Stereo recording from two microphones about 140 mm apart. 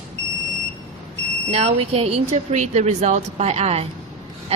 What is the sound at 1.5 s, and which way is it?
A woman's voice, 45° right (ahead or behind).